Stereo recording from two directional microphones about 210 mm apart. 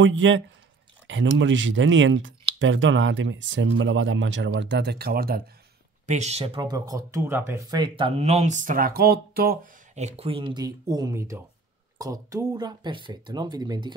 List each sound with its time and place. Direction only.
0.0 s speech: 65° right (ahead or behind); by 5.4 s 45° right (ahead or behind)
6.0 s speech: 35° right (ahead or behind)
9.9 s speech: 30° right (ahead or behind)